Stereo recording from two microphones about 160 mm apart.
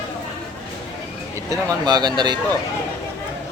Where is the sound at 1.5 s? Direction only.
25° right (ahead or behind).